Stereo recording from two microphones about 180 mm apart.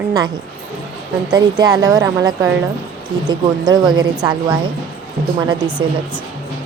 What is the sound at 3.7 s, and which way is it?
Speech, 25° right (ahead or behind).